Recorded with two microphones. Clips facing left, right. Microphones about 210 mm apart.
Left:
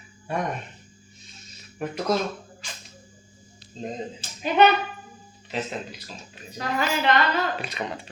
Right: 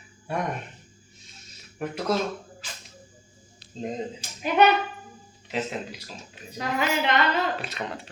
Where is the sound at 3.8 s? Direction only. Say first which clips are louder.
Right 1 dB; 5° right (ahead or behind).